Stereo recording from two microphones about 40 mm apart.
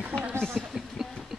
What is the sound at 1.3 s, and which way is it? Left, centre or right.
Train, centre.